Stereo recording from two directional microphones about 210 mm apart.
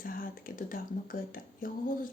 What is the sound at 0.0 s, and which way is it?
Speech, 45° left (ahead or behind).